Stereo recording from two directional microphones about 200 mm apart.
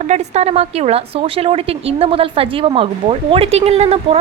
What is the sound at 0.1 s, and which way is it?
A woman's voice, 35° right (ahead or behind).